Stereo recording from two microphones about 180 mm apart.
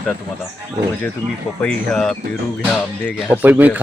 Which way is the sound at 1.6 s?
5° left (ahead or behind).